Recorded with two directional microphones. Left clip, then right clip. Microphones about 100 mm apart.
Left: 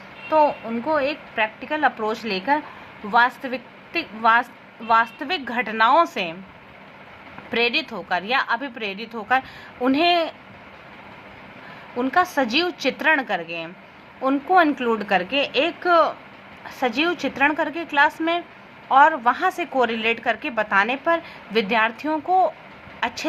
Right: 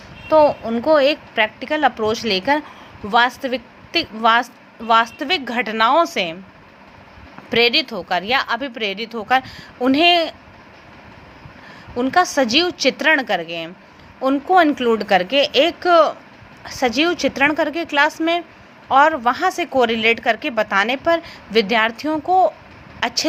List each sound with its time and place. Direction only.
0.3 s a woman's voice: 70° right (ahead or behind)
3.1 s a woman's voice: 65° right (ahead or behind)
7.5 s a woman's voice: 65° right (ahead or behind)
11.9 s a woman's voice: 50° right (ahead or behind)